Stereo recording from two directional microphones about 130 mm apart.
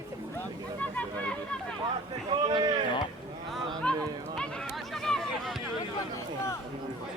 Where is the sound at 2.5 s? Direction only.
35° right (ahead or behind).